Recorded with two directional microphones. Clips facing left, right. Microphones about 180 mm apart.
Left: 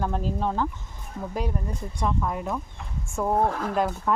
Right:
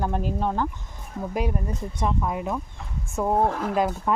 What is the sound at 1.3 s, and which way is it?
Speech, 20° right (ahead or behind).